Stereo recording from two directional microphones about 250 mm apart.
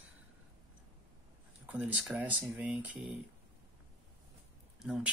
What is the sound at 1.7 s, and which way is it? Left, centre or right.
Speech, centre.